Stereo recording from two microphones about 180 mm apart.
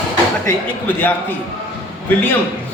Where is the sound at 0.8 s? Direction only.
10° left (ahead or behind).